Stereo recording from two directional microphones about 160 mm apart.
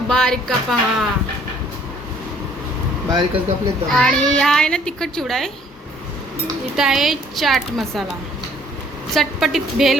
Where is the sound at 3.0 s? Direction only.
25° right (ahead or behind).